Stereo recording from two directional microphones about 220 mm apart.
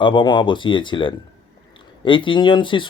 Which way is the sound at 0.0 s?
20° left (ahead or behind).